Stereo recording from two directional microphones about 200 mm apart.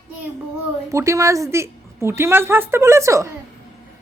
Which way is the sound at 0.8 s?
15° right (ahead or behind).